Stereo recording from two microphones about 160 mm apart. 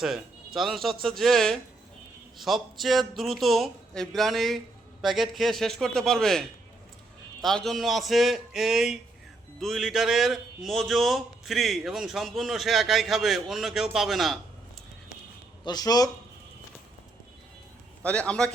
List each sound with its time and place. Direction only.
0.0 s speech: centre (ahead or behind)
7.4 s speech: centre (ahead or behind)
15.6 s speech: 25° left (ahead or behind)
18.0 s a man's voice: 5° left (ahead or behind)